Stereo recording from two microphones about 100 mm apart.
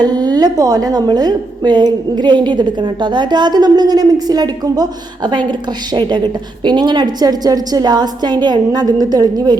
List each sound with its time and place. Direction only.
0.0 s a woman's voice: 45° right (ahead or behind)